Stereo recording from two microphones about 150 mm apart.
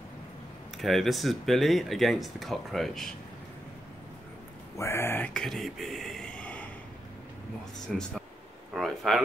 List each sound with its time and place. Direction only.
0.7 s speech: centre (ahead or behind)
4.7 s speech: 15° left (ahead or behind)
7.9 s speech: centre (ahead or behind)
8.7 s a sound: centre (ahead or behind)